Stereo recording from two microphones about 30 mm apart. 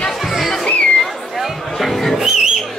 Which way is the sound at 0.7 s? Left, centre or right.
Left.